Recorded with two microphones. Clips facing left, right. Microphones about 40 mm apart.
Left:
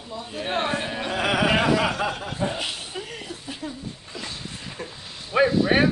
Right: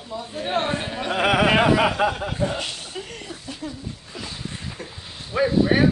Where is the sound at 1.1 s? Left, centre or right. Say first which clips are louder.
Right 4 dB; right.